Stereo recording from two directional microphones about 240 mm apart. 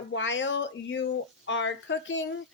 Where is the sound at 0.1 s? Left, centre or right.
Left.